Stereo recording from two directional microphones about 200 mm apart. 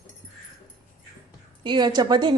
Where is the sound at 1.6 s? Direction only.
20° right (ahead or behind).